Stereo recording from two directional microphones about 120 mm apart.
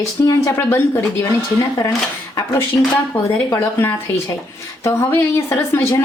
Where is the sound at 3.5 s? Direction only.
20° left (ahead or behind).